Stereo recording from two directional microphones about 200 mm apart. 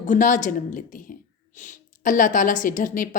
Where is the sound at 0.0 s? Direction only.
40° left (ahead or behind).